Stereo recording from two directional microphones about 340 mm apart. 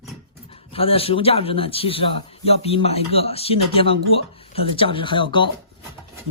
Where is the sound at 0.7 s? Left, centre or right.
Centre.